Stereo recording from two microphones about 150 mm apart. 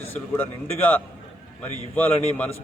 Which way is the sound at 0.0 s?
15° left (ahead or behind).